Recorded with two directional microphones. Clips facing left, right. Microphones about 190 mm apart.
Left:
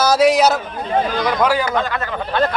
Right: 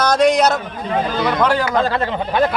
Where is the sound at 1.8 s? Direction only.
30° right (ahead or behind).